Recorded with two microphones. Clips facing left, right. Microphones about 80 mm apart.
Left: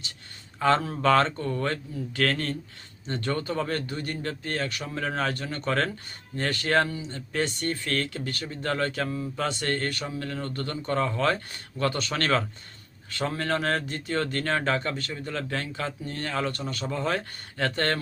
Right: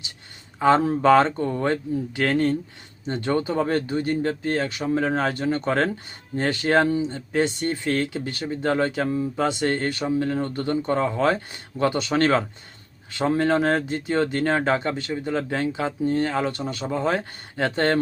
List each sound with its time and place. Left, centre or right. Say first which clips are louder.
0.6 s speech: right 5 dB; centre
7.1 s speech: right 6 dB; centre